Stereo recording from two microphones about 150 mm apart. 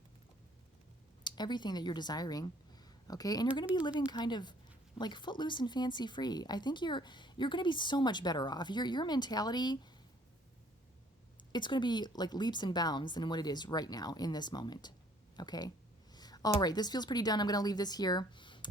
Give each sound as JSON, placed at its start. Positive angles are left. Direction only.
{"t": 1.2, "sound": "speech", "side_deg": 30}
{"t": 11.5, "sound": "speech", "side_deg": 30}